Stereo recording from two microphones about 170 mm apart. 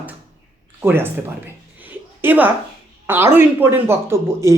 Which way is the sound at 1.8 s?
10° right (ahead or behind).